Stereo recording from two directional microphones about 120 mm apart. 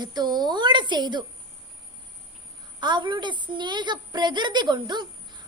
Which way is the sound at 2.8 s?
40° right (ahead or behind).